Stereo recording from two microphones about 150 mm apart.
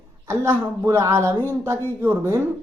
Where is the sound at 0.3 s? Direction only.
15° right (ahead or behind).